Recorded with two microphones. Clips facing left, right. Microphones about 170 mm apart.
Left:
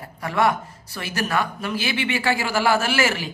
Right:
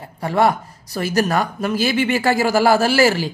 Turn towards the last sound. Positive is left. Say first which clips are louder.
# right 7 dB
turn(degrees=-35)  # may be behind; listen again after turning